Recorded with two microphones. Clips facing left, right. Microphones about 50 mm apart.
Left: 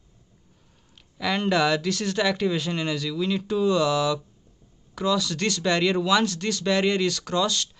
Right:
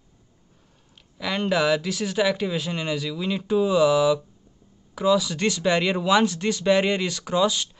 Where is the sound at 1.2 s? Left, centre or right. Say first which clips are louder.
Even; centre.